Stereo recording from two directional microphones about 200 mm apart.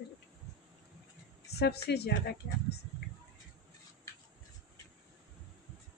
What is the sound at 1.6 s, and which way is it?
Speech, 55° left (ahead or behind).